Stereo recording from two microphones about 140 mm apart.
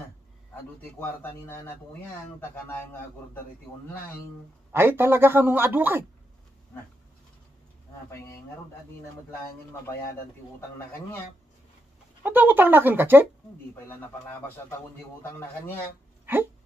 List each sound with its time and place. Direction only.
0.9 s speech: 15° left (ahead or behind)
4.7 s a man's voice: 15° right (ahead or behind)
12.2 s a man's voice: 15° right (ahead or behind)
15.3 s speech: 15° left (ahead or behind)